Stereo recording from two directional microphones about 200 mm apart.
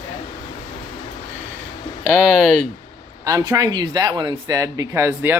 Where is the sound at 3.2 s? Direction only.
15° right (ahead or behind).